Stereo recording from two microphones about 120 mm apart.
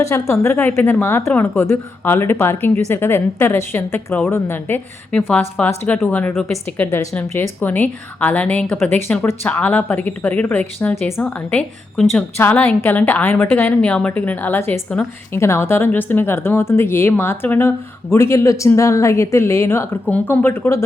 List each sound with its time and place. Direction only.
0.0 s speech: 25° left (ahead or behind)
15.3 s speech: 20° left (ahead or behind)